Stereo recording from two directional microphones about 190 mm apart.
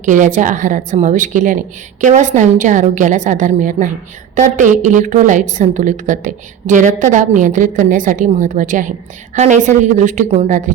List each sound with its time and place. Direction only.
0.0 s a woman's voice: 40° right (ahead or behind)